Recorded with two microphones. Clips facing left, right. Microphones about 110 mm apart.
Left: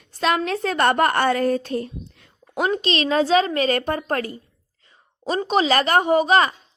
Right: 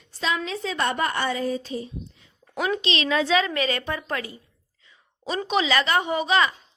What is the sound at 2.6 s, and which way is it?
A woman's voice, 45° left (ahead or behind).